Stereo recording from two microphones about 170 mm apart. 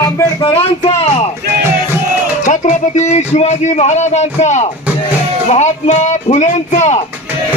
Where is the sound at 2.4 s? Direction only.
45° left (ahead or behind).